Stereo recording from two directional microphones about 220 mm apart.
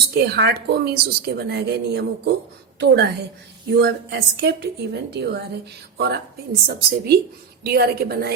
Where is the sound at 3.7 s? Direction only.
50° right (ahead or behind).